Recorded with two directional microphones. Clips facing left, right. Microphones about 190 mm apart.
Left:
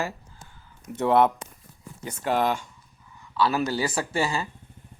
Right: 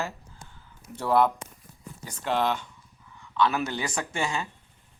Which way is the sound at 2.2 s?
5° left (ahead or behind).